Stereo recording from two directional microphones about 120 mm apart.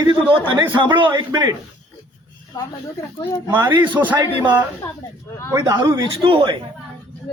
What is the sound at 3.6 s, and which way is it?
Speech, 15° right (ahead or behind).